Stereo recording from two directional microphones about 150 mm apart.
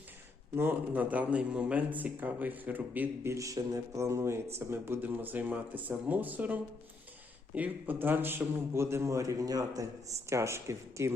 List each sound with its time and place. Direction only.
0.5 s a man's voice: 15° right (ahead or behind)